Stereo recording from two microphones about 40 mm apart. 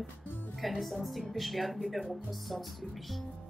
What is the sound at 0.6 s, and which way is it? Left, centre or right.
A woman's voice, centre.